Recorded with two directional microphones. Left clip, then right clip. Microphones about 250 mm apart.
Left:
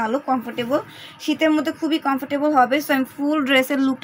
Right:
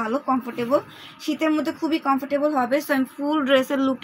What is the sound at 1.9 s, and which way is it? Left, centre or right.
A woman's voice, left.